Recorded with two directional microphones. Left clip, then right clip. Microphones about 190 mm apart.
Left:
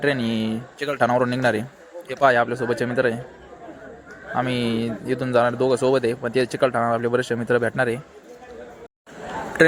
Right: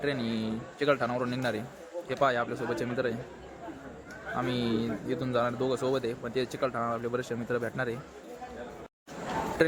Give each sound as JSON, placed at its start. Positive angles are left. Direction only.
{"t": 0.0, "sound": "speech", "side_deg": 30}
{"t": 4.4, "sound": "speech", "side_deg": 25}